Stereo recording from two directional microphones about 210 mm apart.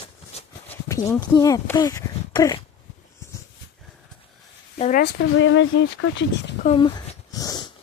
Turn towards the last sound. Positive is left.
turn(degrees=15)  # may be behind; listen again after turning